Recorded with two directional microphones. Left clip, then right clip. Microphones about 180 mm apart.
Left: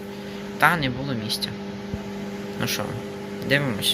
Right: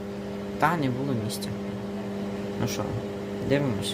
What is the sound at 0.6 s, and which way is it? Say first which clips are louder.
Speech: left 5 dB; 10° right (ahead or behind).